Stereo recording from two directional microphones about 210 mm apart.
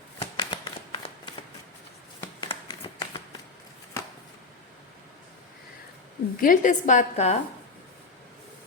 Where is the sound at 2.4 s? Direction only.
20° left (ahead or behind).